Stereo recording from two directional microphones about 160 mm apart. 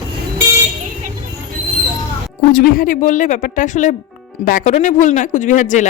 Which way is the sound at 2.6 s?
65° left (ahead or behind).